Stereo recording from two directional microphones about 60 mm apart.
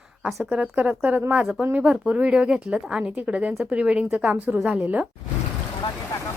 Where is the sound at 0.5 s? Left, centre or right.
Right.